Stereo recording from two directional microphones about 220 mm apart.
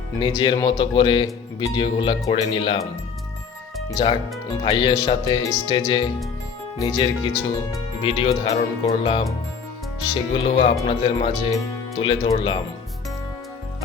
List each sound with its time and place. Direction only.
0.2 s speech: 20° left (ahead or behind)
3.9 s speech: 25° left (ahead or behind)
10.3 s speech: 25° left (ahead or behind)